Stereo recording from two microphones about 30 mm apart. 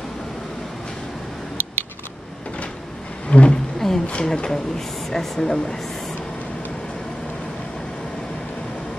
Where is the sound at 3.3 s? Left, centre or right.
Left.